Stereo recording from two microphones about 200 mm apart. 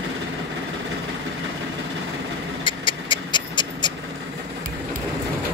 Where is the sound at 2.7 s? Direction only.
25° left (ahead or behind).